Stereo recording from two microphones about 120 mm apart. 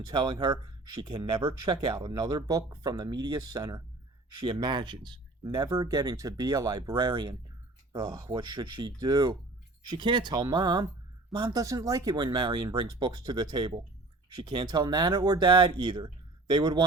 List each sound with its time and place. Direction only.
0.1 s speech: 40° right (ahead or behind)
5.7 s speech: 25° right (ahead or behind)
11.6 s speech: 30° right (ahead or behind)